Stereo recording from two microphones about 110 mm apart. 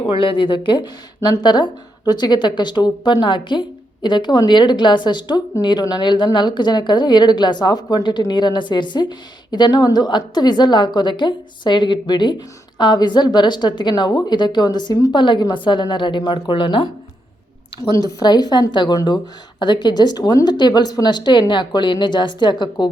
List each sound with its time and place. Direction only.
0.0 s a woman's voice: 55° left (ahead or behind)
18.2 s a woman's voice: 40° left (ahead or behind)